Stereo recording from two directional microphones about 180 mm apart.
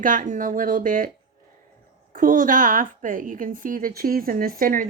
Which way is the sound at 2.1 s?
50° right (ahead or behind).